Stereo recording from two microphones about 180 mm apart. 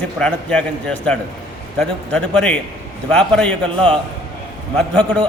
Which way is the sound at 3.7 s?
30° right (ahead or behind).